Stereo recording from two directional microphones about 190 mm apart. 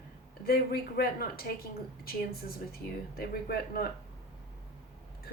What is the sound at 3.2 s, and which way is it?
Speech, 55° left (ahead or behind).